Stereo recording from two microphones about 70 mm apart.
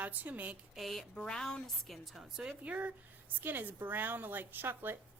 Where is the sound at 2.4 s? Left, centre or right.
Centre.